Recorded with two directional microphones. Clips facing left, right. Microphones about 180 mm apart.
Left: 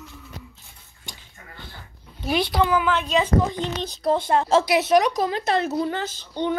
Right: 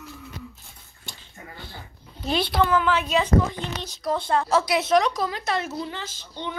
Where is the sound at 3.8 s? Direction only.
30° left (ahead or behind).